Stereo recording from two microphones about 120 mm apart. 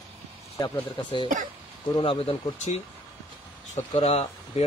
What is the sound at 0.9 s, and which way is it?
Speech, 45° left (ahead or behind).